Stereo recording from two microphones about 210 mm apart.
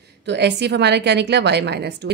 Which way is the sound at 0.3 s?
55° right (ahead or behind).